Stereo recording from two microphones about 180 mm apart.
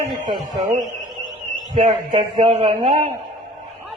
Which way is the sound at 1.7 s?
25° right (ahead or behind).